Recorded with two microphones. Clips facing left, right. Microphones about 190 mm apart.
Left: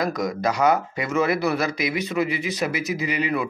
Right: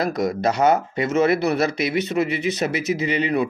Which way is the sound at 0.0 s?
25° right (ahead or behind).